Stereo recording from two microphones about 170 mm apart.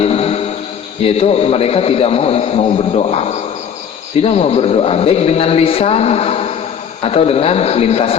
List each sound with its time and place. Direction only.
0.0 s music: 35° left (ahead or behind)
1.0 s a man's voice: 40° left (ahead or behind)